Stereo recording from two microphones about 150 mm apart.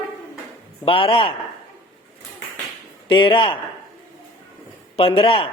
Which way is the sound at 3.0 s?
35° left (ahead or behind).